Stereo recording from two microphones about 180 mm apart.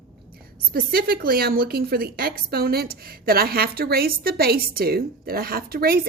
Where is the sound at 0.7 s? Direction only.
60° right (ahead or behind).